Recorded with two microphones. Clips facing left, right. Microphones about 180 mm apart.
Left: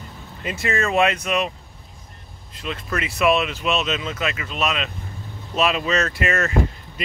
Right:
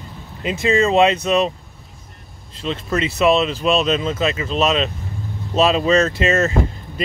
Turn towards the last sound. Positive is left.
turn(degrees=-25)  # may be behind; listen again after turning